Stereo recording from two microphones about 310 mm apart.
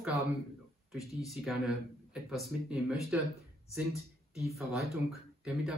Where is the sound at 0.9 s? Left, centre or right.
Centre.